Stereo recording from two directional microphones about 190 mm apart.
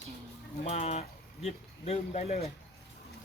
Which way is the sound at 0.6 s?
35° left (ahead or behind).